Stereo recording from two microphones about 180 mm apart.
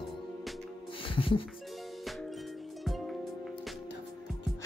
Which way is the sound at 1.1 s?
30° left (ahead or behind).